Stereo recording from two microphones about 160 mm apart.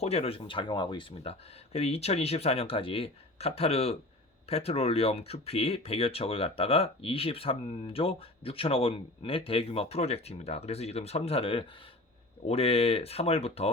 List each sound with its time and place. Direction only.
0.0 s speech: 40° left (ahead or behind)